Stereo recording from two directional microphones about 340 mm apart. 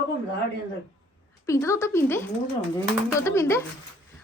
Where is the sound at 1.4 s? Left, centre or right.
Centre.